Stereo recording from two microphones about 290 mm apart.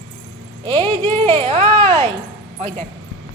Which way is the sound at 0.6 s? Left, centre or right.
Centre.